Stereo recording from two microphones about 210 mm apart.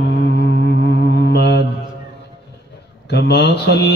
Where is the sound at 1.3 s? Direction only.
55° left (ahead or behind).